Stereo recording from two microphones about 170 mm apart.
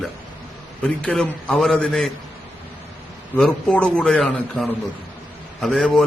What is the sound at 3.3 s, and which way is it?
A man's voice, 5° left (ahead or behind).